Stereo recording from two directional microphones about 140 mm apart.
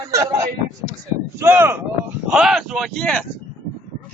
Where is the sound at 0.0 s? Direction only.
20° right (ahead or behind).